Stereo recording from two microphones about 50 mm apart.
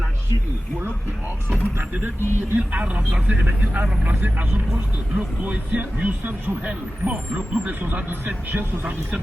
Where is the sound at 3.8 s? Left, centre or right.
Right.